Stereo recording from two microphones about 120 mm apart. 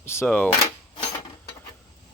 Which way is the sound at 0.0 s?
20° left (ahead or behind).